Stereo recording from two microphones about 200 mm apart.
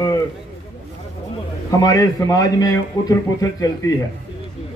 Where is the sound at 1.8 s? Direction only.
15° left (ahead or behind).